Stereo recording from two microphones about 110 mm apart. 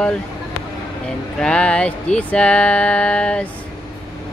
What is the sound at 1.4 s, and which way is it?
Speech, 10° left (ahead or behind).